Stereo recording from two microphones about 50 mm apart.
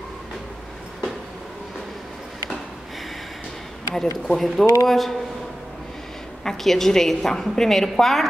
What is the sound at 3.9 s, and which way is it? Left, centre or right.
A woman's voice, centre.